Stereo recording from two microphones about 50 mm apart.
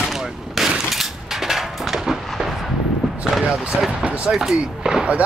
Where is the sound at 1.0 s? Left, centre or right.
Centre.